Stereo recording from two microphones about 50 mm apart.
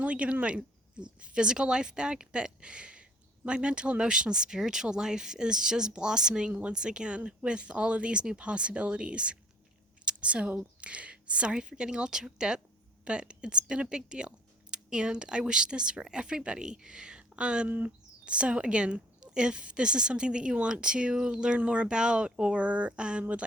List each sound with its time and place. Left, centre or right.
0.0 s speech: right
6.5 s a woman's voice: right
6.7 s a woman's voice: centre
10.1 s a sound: right
10.5 s a woman's voice: right
17.7 s speech: right
18.3 s a woman's voice: right